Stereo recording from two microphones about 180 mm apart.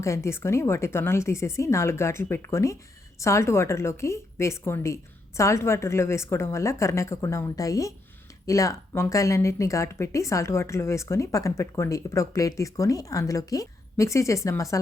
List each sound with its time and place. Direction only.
0.0 s speech: 15° left (ahead or behind)